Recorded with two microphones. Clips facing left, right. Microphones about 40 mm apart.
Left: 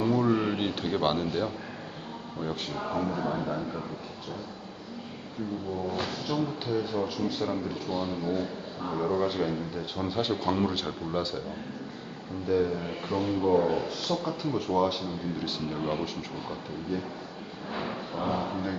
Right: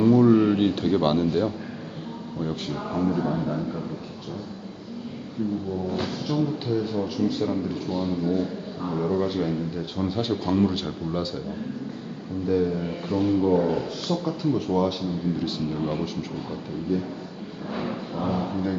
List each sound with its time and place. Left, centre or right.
0.0 s a sound: centre
2.4 s a man's voice: centre
5.7 s a man's voice: centre
12.5 s a man's voice: centre